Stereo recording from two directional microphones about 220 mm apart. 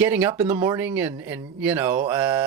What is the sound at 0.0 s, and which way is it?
Speech, 5° right (ahead or behind).